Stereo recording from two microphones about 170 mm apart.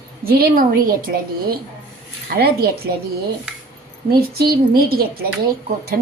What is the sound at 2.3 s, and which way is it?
Speech, 65° right (ahead or behind).